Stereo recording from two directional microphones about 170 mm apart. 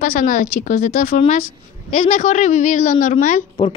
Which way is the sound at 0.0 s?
50° left (ahead or behind).